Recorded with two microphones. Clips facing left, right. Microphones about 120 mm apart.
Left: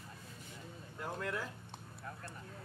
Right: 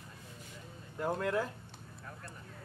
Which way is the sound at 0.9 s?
55° right (ahead or behind).